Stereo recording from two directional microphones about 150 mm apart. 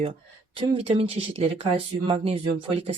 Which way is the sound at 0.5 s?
40° right (ahead or behind).